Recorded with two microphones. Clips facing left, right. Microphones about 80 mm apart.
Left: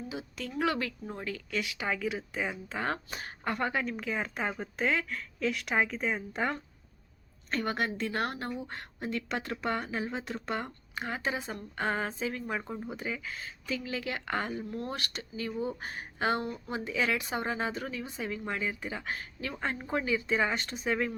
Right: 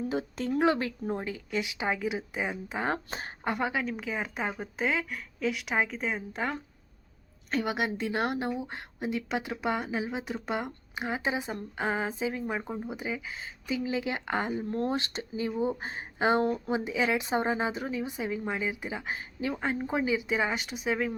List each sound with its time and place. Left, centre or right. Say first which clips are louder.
0.1 s a woman's voice: right 8 dB; right; by 3.0 s centre
3.1 s speech: right 3 dB; right
3.4 s a woman's voice: right 2 dB; centre
3.7 s a woman's voice: right 1 dB; centre
11.8 s a woman's voice: right 1 dB; centre